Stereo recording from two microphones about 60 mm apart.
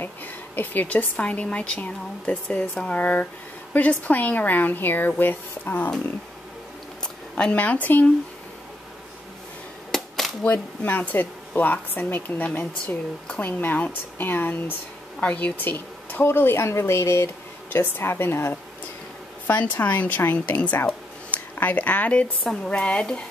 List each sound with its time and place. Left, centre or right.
0.0 s a woman's voice: left
7.0 s a sound: centre
7.5 s a woman's voice: left
9.8 s a sound: centre
10.4 s a woman's voice: left
17.6 s speech: left
19.6 s a woman's voice: left